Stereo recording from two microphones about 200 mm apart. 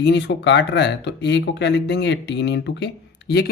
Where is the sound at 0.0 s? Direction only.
60° left (ahead or behind).